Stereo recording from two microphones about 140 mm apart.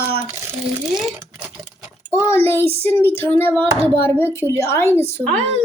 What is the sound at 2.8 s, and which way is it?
Speech, 15° left (ahead or behind).